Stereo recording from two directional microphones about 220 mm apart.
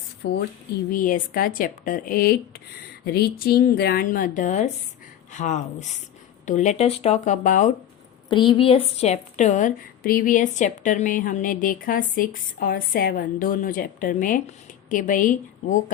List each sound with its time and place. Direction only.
0.2 s a woman's voice: 50° left (ahead or behind)
8.3 s a woman's voice: 20° left (ahead or behind)